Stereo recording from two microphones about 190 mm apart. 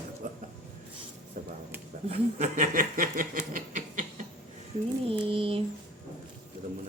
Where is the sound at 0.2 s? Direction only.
45° right (ahead or behind).